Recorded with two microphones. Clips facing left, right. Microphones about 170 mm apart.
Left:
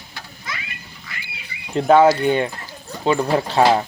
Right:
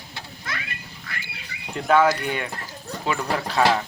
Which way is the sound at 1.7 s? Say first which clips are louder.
Left 6 dB; 30° left (ahead or behind).